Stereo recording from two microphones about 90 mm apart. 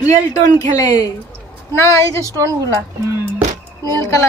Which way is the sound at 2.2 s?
35° right (ahead or behind).